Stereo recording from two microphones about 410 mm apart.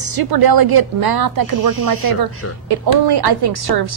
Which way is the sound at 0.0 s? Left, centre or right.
Right.